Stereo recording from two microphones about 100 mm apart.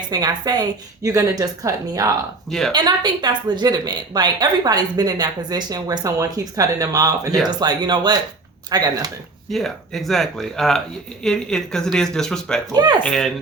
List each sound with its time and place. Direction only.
0.1 s a woman's voice: 40° right (ahead or behind)
2.5 s speech: 5° left (ahead or behind)
2.7 s a woman's voice: 45° right (ahead or behind)
9.5 s speech: centre (ahead or behind)
12.7 s a woman's voice: 45° right (ahead or behind)
13.0 s speech: 5° left (ahead or behind)